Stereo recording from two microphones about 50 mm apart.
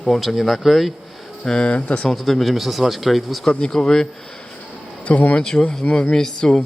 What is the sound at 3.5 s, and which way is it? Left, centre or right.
Speech, centre.